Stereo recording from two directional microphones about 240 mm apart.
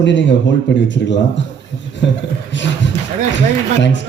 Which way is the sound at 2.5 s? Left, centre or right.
Left.